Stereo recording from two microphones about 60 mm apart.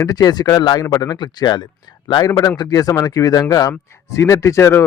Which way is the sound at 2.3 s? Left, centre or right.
Left.